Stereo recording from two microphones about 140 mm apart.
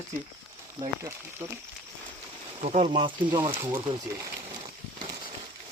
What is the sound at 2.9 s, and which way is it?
Speech, 35° right (ahead or behind).